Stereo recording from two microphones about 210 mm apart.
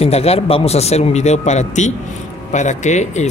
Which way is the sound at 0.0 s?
30° left (ahead or behind).